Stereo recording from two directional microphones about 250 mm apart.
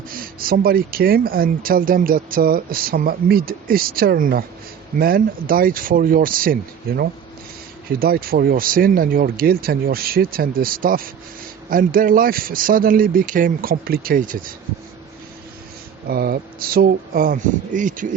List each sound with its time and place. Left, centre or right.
0.1 s speech: right
16.0 s speech: right